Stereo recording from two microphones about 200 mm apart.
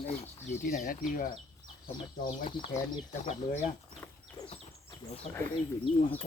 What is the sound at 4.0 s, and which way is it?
Chicken, 10° left (ahead or behind).